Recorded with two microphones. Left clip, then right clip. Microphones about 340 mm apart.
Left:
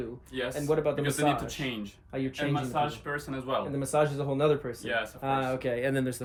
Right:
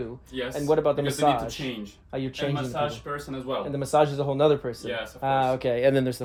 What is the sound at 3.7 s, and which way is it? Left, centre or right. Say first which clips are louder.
Speech: right 7 dB; centre.